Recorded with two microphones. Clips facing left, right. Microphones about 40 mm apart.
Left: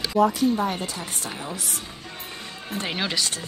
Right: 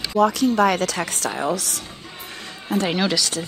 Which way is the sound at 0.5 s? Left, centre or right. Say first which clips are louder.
Right 8 dB; right.